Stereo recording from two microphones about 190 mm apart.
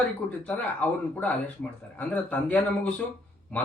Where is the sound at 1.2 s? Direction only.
10° left (ahead or behind).